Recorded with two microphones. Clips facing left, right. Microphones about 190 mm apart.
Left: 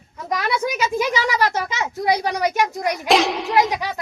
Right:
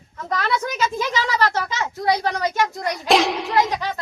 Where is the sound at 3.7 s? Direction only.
15° left (ahead or behind).